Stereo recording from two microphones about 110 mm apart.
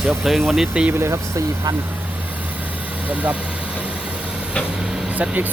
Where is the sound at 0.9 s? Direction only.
25° right (ahead or behind).